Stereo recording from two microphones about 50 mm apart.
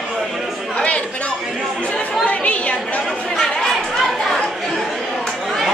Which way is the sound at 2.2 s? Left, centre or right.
Left.